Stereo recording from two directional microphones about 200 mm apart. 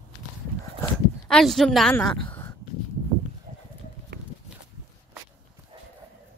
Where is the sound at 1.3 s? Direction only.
5° left (ahead or behind).